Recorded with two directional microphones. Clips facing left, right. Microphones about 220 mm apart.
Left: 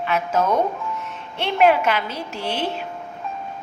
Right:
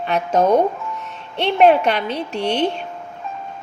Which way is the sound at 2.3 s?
5° left (ahead or behind).